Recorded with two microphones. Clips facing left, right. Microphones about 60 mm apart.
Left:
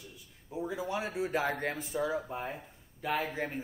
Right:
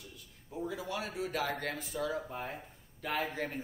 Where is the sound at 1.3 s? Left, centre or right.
Left.